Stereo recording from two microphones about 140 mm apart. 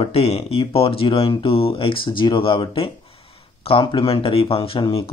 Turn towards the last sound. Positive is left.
turn(degrees=40)  # may be behind; listen again after turning